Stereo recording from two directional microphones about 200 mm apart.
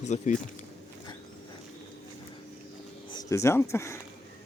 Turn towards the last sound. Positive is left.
turn(degrees=15)  # may be behind; listen again after turning